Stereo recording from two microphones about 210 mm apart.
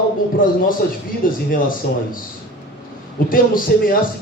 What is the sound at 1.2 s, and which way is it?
Speech, 40° left (ahead or behind).